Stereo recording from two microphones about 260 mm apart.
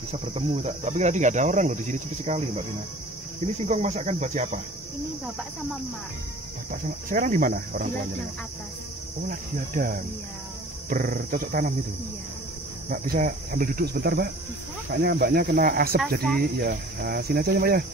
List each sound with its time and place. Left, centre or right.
0.1 s speech: right
3.6 s speech: right
6.7 s cricket: right
9.3 s cricket: right
12.9 s cricket: right